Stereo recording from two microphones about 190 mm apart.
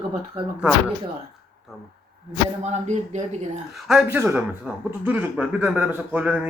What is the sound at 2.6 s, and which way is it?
Speech, 35° right (ahead or behind).